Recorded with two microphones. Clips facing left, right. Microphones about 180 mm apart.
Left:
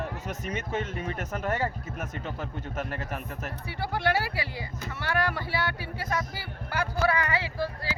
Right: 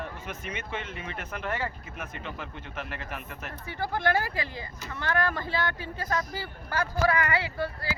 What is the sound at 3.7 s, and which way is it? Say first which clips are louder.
Speech: right 1 dB; 10° left (ahead or behind).